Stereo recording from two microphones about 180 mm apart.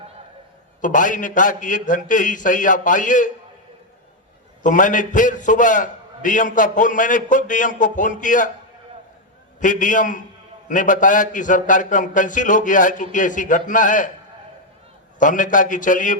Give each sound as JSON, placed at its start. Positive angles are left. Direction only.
{"t": 0.8, "sound": "a man's voice", "side_deg": 45}
{"t": 4.6, "sound": "a man's voice", "side_deg": 45}
{"t": 9.6, "sound": "a man's voice", "side_deg": 45}
{"t": 15.2, "sound": "a man's voice", "side_deg": 45}